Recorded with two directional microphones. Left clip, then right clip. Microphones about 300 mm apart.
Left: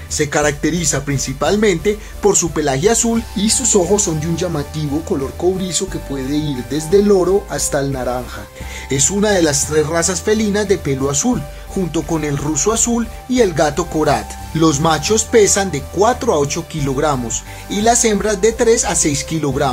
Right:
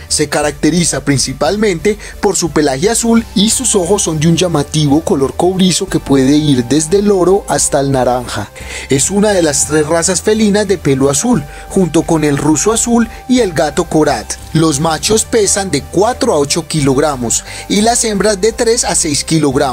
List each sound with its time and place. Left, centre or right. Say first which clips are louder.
0.1 s speech: right 2 dB; right